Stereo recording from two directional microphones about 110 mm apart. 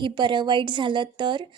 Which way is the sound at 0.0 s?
45° right (ahead or behind).